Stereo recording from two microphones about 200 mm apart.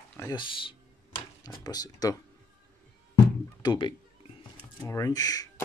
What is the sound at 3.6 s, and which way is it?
Speech, 25° left (ahead or behind).